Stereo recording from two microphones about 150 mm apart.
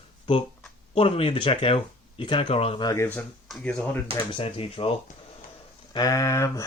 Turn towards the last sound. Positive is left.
turn(degrees=20)  # may be behind; listen again after turning